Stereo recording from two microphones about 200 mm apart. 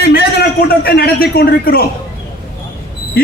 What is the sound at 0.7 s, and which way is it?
Speech, 50° left (ahead or behind).